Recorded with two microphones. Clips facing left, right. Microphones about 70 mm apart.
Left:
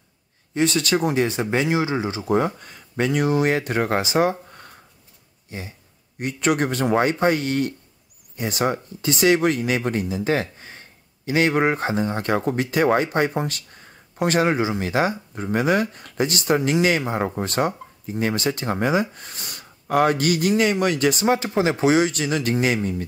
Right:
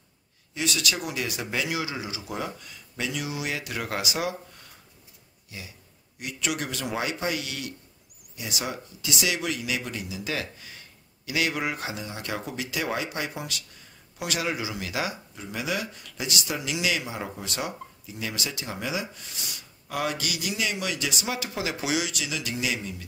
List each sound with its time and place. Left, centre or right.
0.6 s speech: left